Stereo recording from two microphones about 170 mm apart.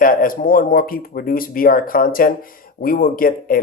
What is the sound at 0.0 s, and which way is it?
Speech, 55° left (ahead or behind).